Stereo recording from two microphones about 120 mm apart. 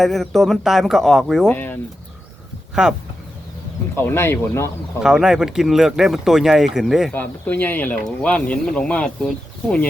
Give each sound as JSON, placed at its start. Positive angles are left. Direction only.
{"t": 0.0, "sound": "speech", "side_deg": 0}
{"t": 1.5, "sound": "speech", "side_deg": 15}
{"t": 2.8, "sound": "speech", "side_deg": -5}
{"t": 3.9, "sound": "speech", "side_deg": 20}
{"t": 5.0, "sound": "speech", "side_deg": -5}
{"t": 7.1, "sound": "speech", "side_deg": 15}